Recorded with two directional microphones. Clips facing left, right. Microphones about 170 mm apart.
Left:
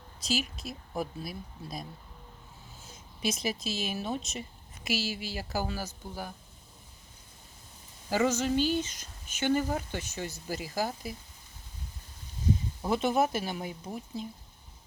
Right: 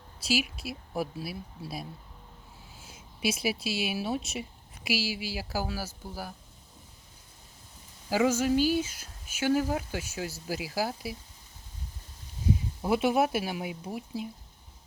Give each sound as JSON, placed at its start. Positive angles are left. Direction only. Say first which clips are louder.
{"t": 0.2, "sound": "speech", "louder": "right 3 dB", "side_deg": -10}
{"t": 8.1, "sound": "speech", "louder": "right 2 dB", "side_deg": -10}
{"t": 12.8, "sound": "speech", "louder": "right 2 dB", "side_deg": -10}